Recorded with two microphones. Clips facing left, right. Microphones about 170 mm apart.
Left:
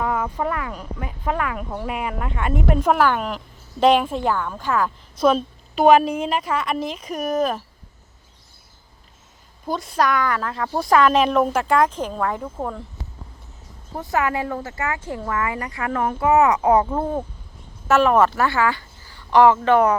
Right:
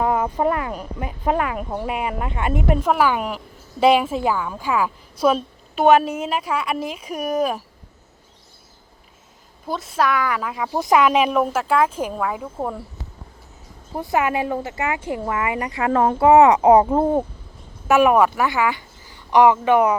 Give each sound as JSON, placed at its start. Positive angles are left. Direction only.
{"t": 0.0, "sound": "speech", "side_deg": -20}
{"t": 1.9, "sound": "speech", "side_deg": -5}
{"t": 9.6, "sound": "speech", "side_deg": 0}
{"t": 13.9, "sound": "speech", "side_deg": -10}
{"t": 17.8, "sound": "a woman's voice", "side_deg": -15}